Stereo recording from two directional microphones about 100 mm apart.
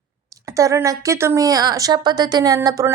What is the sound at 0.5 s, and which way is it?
Speech, 30° right (ahead or behind).